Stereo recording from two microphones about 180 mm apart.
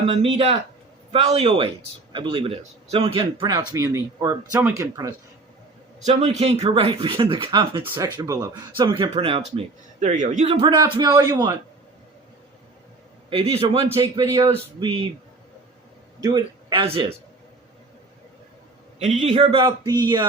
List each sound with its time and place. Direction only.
0.1 s a man's voice: 35° right (ahead or behind); by 5.1 s 20° right (ahead or behind)
6.1 s speech: 40° right (ahead or behind)
9.6 s speech: 40° right (ahead or behind)
10.4 s speech: 30° right (ahead or behind)
13.3 s a man's voice: 30° right (ahead or behind)
16.2 s a man's voice: 20° right (ahead or behind)
19.2 s a man's voice: 35° right (ahead or behind)